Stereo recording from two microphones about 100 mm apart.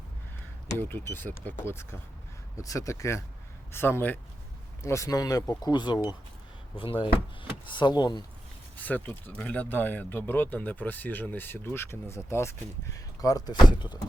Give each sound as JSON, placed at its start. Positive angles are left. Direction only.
{"t": 0.8, "sound": "speech", "side_deg": 20}
{"t": 5.7, "sound": "speech", "side_deg": 50}
{"t": 6.7, "sound": "speech", "side_deg": 60}
{"t": 8.8, "sound": "speech", "side_deg": 15}